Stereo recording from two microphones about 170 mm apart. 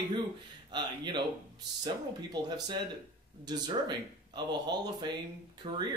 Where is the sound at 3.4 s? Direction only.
25° right (ahead or behind).